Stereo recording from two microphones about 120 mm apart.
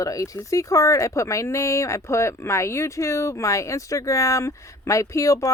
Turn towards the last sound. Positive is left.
turn(degrees=25)  # may be behind; listen again after turning